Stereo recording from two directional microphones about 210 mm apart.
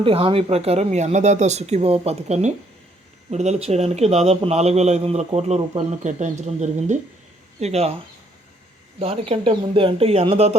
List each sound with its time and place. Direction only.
0.0 s a man's voice: 25° right (ahead or behind)